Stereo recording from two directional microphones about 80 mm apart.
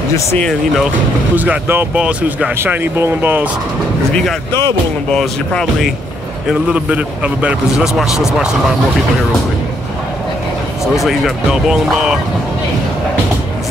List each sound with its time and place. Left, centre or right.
0.1 s speech: left
0.4 s speech: centre
1.3 s speech: right
2.0 s speech: centre
2.5 s speech: right
5.1 s speech: centre
6.5 s speech: centre
7.8 s speech: centre
11.0 s speech: centre